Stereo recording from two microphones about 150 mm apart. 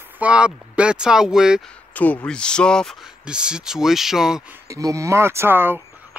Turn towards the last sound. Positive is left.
turn(degrees=-15)  # may be behind; listen again after turning